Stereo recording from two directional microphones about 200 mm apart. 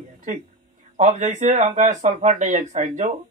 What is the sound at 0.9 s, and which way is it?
Speech, 35° right (ahead or behind).